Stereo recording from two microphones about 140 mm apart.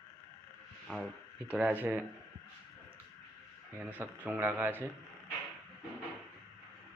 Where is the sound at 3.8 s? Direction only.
10° right (ahead or behind).